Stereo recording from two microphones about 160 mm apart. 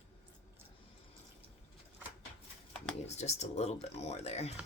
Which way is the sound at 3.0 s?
45° left (ahead or behind).